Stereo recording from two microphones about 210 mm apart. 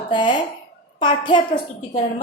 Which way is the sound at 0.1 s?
20° left (ahead or behind).